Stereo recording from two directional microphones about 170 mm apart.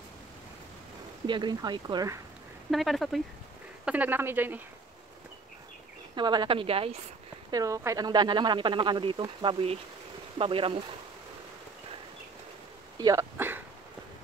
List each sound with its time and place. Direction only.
1.2 s speech: 25° right (ahead or behind)
2.7 s speech: centre (ahead or behind)
6.1 s a woman's voice: 25° right (ahead or behind)
7.5 s speech: 20° right (ahead or behind)
12.9 s speech: 20° right (ahead or behind)